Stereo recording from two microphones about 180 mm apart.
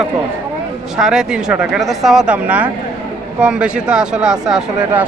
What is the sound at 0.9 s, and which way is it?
Speech, 5° right (ahead or behind).